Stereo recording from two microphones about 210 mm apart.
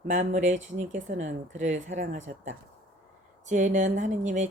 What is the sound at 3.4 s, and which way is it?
Speech, 35° right (ahead or behind).